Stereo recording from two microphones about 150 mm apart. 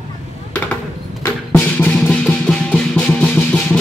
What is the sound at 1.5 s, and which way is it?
Music, 10° left (ahead or behind).